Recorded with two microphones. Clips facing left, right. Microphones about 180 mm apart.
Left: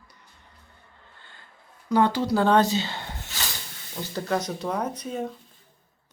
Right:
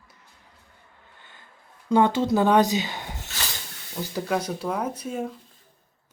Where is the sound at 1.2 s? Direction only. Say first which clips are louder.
Right 1 dB; 15° right (ahead or behind).